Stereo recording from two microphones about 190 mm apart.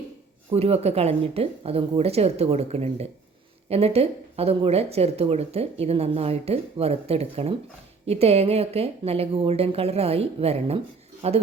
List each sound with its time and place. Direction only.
0.5 s speech: 35° right (ahead or behind)